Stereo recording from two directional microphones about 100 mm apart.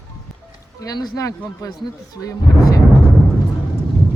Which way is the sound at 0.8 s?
40° left (ahead or behind).